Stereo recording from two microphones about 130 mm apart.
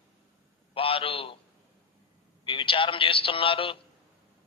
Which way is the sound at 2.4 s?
40° left (ahead or behind).